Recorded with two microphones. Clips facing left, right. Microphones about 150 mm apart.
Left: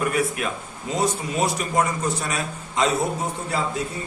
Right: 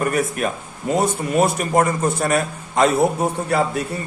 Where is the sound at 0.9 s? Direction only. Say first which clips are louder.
Right 5 dB; 55° right (ahead or behind).